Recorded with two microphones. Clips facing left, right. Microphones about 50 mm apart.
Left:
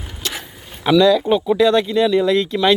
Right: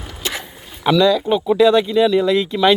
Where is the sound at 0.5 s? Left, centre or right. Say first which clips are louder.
Left 2 dB; centre.